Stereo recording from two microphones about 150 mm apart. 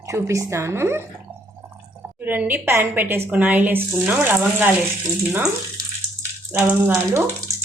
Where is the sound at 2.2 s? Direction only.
10° right (ahead or behind).